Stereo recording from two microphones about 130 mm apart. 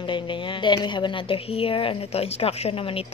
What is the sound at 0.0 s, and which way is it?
A woman's voice, 40° left (ahead or behind).